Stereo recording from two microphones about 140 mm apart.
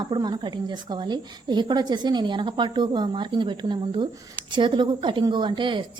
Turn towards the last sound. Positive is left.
turn(degrees=-35)  # may be behind; listen again after turning